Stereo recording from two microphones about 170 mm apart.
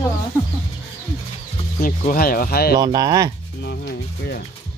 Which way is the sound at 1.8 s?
55° left (ahead or behind).